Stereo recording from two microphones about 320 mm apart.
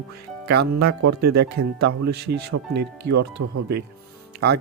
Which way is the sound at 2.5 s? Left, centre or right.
Right.